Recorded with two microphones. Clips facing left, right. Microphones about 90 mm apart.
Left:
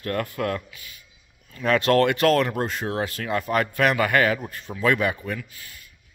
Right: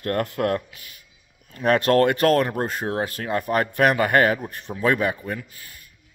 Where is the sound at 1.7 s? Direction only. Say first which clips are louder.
Right 1 dB; 45° right (ahead or behind).